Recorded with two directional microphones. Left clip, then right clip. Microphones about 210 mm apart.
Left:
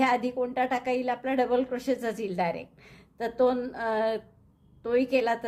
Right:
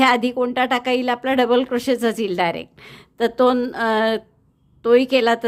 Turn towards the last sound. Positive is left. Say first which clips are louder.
# right 10 dB
turn(degrees=-35)  # may be behind; listen again after turning